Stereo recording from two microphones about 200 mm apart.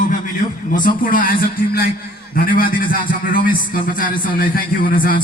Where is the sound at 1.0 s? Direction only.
45° left (ahead or behind).